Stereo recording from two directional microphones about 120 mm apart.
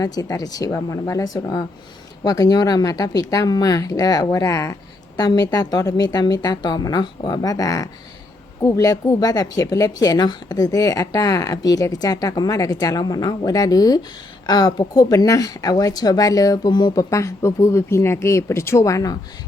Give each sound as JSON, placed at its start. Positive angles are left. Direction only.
{"t": 0.0, "sound": "speech", "side_deg": 30}